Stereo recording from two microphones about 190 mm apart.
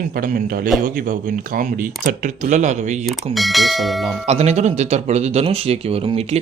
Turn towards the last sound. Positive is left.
turn(degrees=-30)  # may be behind; listen again after turning